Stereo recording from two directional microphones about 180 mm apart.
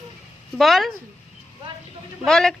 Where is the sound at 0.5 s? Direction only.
Centre (ahead or behind).